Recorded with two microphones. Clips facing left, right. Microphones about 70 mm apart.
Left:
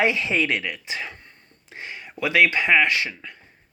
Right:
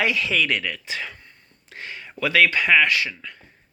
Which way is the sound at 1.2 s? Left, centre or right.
Left.